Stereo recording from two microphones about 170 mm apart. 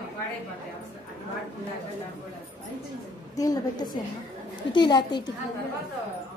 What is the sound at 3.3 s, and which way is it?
A woman's voice, 20° left (ahead or behind).